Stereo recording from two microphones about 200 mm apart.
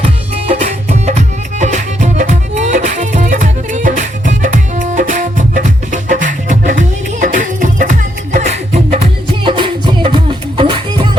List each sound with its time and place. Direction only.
0.0 s music: 30° right (ahead or behind)
9.4 s music: 25° right (ahead or behind)